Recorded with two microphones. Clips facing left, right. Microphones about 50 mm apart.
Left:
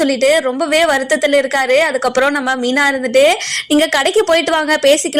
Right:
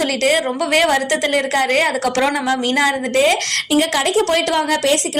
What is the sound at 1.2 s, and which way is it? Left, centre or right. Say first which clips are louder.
A woman's voice: left 4 dB; left.